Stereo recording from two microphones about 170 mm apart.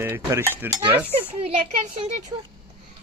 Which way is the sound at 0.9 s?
10° right (ahead or behind).